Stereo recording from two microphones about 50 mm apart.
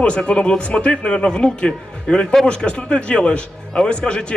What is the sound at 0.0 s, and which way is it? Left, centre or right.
A man's voice, centre.